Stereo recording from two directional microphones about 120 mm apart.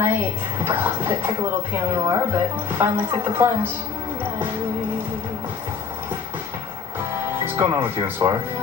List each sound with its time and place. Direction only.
0.0 s speech: 20° right (ahead or behind)
7.4 s speech: 20° right (ahead or behind)